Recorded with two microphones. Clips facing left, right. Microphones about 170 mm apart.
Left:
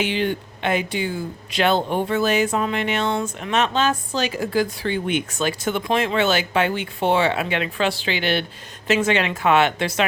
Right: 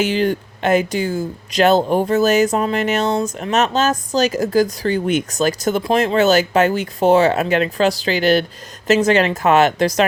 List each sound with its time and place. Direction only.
0.0 s speech: 40° right (ahead or behind)